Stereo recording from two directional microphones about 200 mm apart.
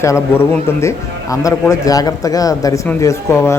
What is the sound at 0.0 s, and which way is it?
A man's voice, 15° left (ahead or behind).